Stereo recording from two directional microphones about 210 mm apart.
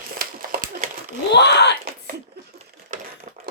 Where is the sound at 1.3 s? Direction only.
55° left (ahead or behind).